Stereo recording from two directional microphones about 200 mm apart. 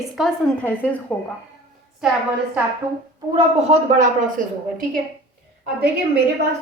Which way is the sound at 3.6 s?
30° right (ahead or behind).